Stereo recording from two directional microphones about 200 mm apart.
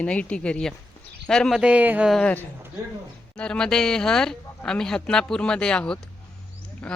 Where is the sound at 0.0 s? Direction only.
5° left (ahead or behind).